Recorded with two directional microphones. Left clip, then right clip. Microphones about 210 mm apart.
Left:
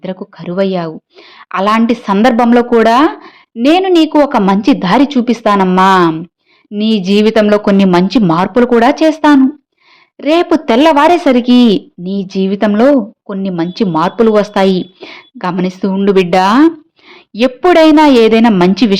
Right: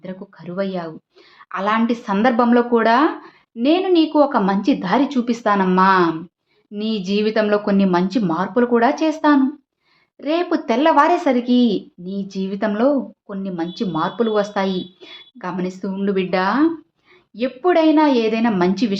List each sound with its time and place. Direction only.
0.0 s a woman's voice: 40° left (ahead or behind)